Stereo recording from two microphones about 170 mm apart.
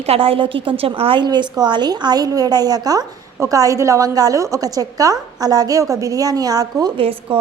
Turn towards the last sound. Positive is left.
turn(degrees=-30)  # may be behind; listen again after turning